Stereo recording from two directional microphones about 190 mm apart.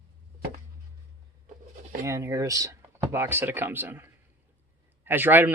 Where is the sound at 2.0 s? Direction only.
15° right (ahead or behind).